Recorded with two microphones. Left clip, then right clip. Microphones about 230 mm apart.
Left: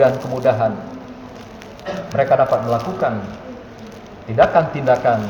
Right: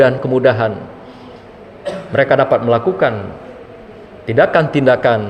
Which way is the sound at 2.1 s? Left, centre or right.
Right.